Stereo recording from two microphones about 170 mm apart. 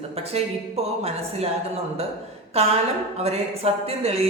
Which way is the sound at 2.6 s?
40° right (ahead or behind).